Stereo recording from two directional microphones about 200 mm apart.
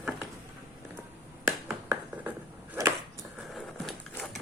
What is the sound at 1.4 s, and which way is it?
Finger snapping, 5° right (ahead or behind).